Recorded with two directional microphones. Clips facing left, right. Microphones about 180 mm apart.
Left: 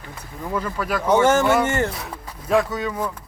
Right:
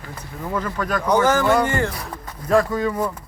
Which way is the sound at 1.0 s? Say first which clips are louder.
Left 1 dB; 25° left (ahead or behind).